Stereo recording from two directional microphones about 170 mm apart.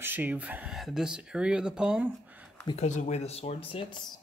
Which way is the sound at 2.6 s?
40° left (ahead or behind).